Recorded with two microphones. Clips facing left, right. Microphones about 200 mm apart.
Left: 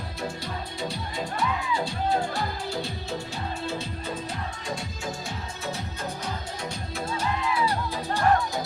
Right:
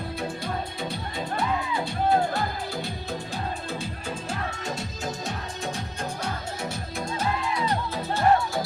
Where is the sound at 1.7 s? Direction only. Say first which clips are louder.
Right 4 dB; 55° right (ahead or behind).